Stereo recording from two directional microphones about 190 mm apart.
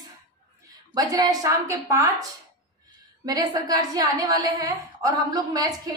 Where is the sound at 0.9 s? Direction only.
20° right (ahead or behind).